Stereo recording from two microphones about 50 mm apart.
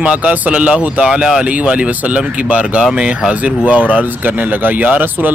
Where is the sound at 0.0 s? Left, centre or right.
Right.